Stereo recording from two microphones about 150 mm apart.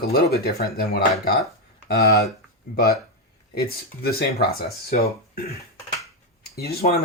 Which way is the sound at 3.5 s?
90° left.